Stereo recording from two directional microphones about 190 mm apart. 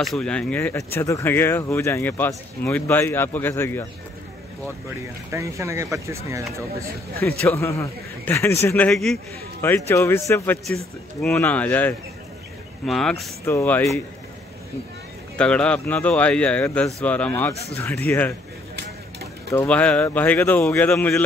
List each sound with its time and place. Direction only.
0.0 s speech: 5° left (ahead or behind)
5.3 s speech: 15° right (ahead or behind)
7.2 s speech: 10° left (ahead or behind)
13.5 s speech: 10° left (ahead or behind)
15.3 s speech: 5° left (ahead or behind)
19.5 s speech: 10° left (ahead or behind)